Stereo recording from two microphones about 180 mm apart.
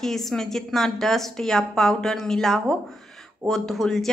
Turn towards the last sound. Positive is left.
turn(degrees=0)  # may be behind; listen again after turning